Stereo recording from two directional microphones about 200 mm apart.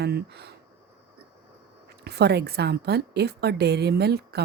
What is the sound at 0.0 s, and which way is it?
Speech, 55° right (ahead or behind).